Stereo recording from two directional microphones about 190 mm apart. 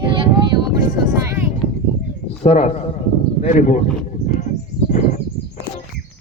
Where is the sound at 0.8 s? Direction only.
15° right (ahead or behind).